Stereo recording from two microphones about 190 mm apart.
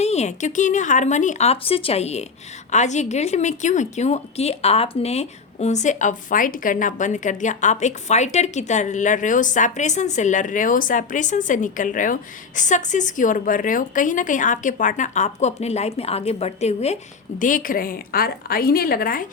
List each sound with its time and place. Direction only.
0.0 s a woman's voice: 35° left (ahead or behind)